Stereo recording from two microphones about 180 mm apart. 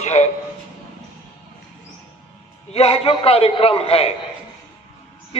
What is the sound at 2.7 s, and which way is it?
A man's voice, 35° left (ahead or behind).